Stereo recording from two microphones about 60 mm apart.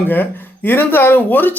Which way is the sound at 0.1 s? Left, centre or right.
Left.